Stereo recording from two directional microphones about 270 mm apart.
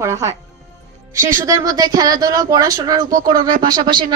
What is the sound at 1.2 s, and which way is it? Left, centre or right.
Speech, right.